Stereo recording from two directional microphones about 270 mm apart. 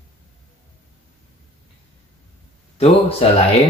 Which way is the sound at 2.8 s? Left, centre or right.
Left.